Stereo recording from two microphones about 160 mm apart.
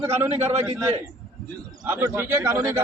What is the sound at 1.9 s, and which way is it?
Speech, 15° right (ahead or behind).